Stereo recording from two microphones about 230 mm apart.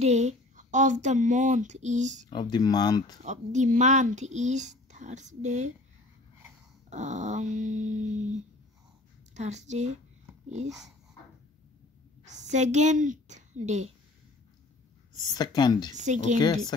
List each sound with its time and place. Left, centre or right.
0.0 s speech: right
2.2 s speech: centre
3.3 s speech: right
6.9 s speech: right
12.3 s a woman's voice: right
15.3 s speech: centre
15.9 s speech: right